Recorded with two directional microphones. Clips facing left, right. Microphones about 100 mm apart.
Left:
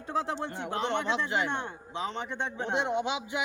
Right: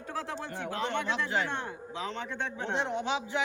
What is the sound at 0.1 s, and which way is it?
A man's voice, 25° left (ahead or behind).